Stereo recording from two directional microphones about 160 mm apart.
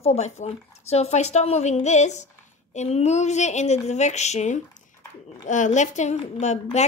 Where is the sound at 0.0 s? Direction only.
40° left (ahead or behind).